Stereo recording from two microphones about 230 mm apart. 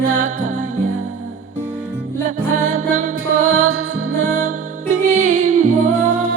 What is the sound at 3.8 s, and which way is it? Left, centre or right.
Music, right.